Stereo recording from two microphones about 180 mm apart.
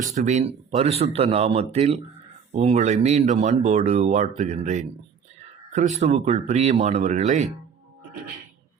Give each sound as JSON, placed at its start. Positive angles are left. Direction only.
{"t": 0.0, "sound": "speech", "side_deg": -40}